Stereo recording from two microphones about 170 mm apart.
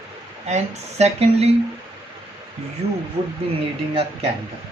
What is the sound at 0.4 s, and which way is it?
Speech, 40° right (ahead or behind).